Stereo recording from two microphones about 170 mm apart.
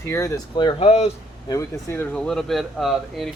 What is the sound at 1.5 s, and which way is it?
Speech, 15° left (ahead or behind).